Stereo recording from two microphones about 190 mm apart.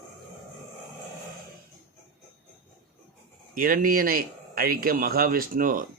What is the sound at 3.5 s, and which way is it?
A man's voice, 45° right (ahead or behind).